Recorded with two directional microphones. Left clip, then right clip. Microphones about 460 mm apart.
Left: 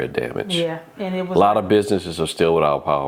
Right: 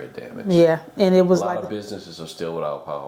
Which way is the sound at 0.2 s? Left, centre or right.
Left.